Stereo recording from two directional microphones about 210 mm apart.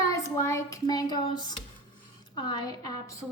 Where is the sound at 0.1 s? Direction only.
15° left (ahead or behind).